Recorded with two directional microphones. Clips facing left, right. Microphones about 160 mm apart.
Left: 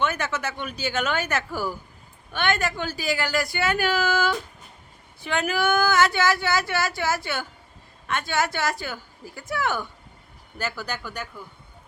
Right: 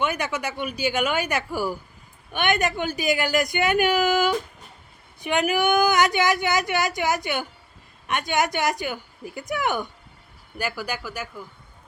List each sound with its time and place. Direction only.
0.0 s speech: 15° right (ahead or behind)